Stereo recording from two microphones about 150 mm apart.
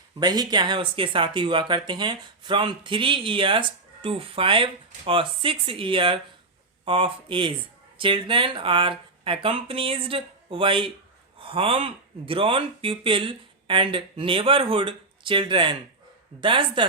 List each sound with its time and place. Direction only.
0.2 s speech: 25° right (ahead or behind)